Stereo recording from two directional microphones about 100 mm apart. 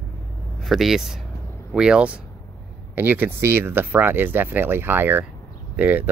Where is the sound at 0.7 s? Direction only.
Centre (ahead or behind).